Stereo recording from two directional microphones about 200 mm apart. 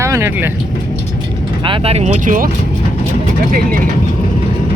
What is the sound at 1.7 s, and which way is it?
Speech, 30° right (ahead or behind).